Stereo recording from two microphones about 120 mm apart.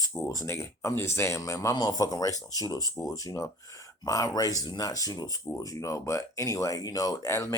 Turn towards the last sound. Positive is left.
turn(degrees=25)  # may be behind; listen again after turning